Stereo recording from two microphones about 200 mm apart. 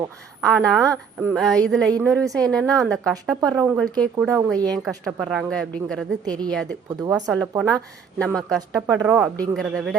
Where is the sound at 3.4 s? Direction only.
20° right (ahead or behind).